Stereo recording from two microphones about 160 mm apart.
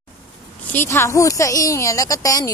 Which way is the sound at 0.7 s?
15° left (ahead or behind).